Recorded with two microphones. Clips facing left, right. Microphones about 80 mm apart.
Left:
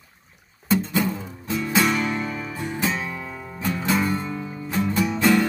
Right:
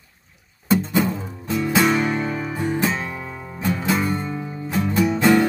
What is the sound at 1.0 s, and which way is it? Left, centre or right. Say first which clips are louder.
Music: right 2 dB; right.